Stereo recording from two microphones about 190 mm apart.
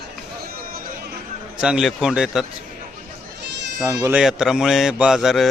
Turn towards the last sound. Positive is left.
turn(degrees=0)  # may be behind; listen again after turning